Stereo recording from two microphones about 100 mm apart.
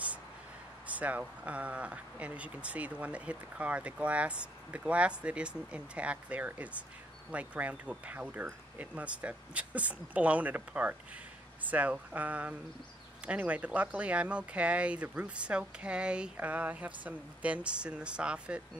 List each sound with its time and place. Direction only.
0.9 s speech: 15° right (ahead or behind)